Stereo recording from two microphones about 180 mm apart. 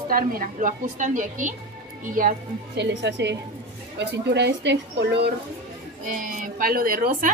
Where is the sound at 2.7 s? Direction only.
70° right (ahead or behind).